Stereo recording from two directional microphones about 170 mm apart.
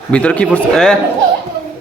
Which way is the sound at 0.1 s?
5° left (ahead or behind).